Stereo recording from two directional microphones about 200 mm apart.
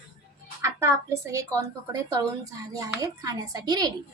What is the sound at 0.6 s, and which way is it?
A woman's voice, 15° right (ahead or behind).